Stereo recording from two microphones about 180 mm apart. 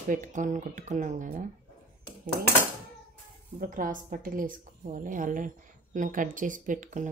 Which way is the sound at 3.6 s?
50° right (ahead or behind).